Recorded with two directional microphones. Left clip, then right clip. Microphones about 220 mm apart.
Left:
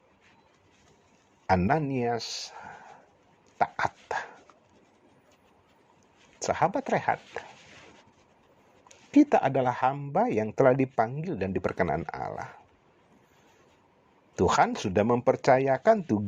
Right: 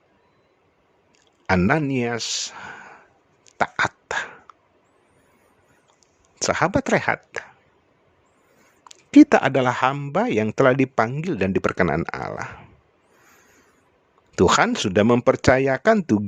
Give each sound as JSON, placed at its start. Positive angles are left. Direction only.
{"t": 1.5, "sound": "a man's voice", "side_deg": -45}
{"t": 3.4, "sound": "dog", "side_deg": -45}
{"t": 6.4, "sound": "speech", "side_deg": -50}
{"t": 9.1, "sound": "speech", "side_deg": -50}
{"t": 14.3, "sound": "speech", "side_deg": -45}